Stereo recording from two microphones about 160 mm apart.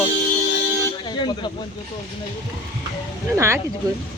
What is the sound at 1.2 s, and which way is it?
Speech, 25° left (ahead or behind).